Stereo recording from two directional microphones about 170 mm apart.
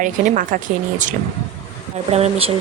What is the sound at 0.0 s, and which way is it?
Speech, 50° right (ahead or behind).